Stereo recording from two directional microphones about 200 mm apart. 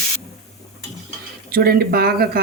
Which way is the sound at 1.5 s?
50° right (ahead or behind).